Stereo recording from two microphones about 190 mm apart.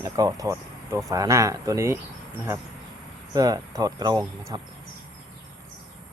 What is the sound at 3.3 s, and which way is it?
Speech, 20° right (ahead or behind).